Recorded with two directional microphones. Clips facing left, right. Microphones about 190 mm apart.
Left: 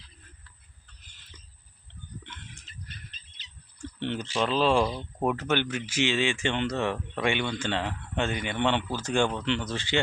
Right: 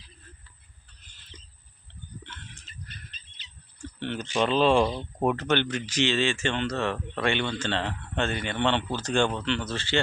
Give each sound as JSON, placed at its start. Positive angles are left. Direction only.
{"t": 4.0, "sound": "speech", "side_deg": 20}
{"t": 4.4, "sound": "speech", "side_deg": 0}